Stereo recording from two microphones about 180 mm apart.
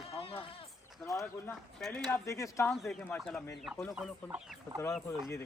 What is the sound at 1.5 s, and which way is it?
Speech, centre (ahead or behind).